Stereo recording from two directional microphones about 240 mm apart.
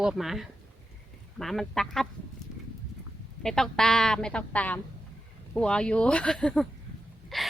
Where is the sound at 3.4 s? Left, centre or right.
Centre.